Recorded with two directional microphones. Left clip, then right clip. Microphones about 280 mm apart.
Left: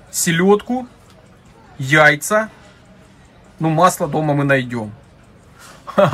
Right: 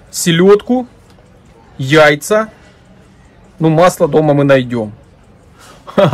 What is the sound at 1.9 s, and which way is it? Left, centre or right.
Speech, right.